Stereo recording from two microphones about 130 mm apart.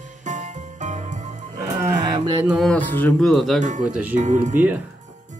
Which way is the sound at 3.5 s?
70° right (ahead or behind).